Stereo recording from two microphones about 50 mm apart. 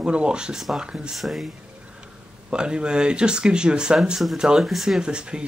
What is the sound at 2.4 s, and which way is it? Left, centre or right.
Speech, centre.